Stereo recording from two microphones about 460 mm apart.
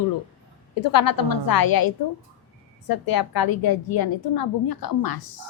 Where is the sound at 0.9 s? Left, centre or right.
Left.